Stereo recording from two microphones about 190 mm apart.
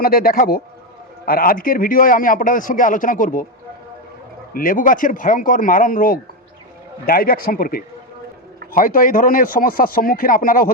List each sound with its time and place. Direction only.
0.0 s a man's voice: 50° left (ahead or behind)
4.5 s a man's voice: 50° left (ahead or behind)